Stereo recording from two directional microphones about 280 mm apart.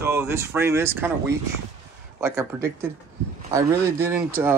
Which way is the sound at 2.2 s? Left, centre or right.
Centre.